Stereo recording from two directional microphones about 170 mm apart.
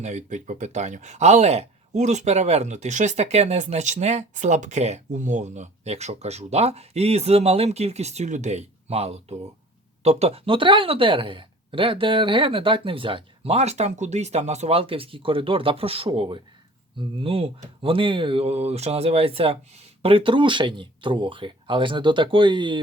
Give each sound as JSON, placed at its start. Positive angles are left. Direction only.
{"t": 0.0, "sound": "speech", "side_deg": -45}